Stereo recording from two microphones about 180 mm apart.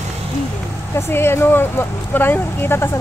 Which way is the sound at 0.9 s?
15° left (ahead or behind).